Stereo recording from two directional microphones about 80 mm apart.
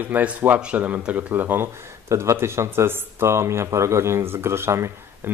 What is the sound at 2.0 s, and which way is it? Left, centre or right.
A man's voice, right.